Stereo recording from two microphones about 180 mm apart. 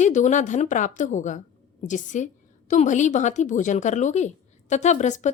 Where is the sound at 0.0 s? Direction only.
40° left (ahead or behind).